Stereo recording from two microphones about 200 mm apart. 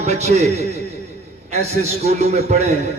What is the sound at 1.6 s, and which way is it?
A man's voice, 35° right (ahead or behind).